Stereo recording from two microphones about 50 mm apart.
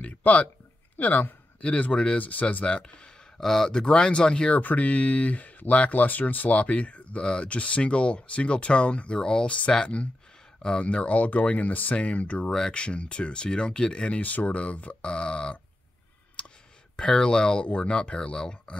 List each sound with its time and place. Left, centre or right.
0.0 s speech: left
2.6 s speech: left
3.3 s speech: centre
4.6 s speech: left; by 9.6 s centre
10.6 s speech: centre
16.4 s clicking: left
16.9 s speech: centre